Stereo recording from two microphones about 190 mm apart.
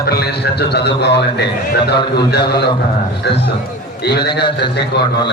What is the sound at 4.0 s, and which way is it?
A man's voice, 60° left (ahead or behind).